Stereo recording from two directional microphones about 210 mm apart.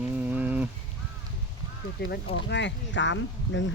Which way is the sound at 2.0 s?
45° left (ahead or behind).